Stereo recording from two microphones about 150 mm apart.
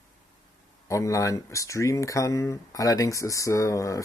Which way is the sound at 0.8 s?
20° left (ahead or behind).